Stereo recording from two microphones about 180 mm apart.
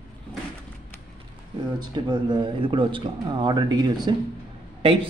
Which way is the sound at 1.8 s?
25° right (ahead or behind).